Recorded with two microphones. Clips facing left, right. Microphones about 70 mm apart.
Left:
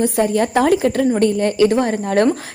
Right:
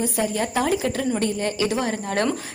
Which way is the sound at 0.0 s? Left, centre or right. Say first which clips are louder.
Left 7 dB; left.